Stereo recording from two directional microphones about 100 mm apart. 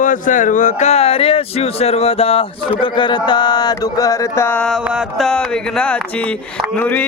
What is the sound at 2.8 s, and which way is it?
Speech, 50° left (ahead or behind).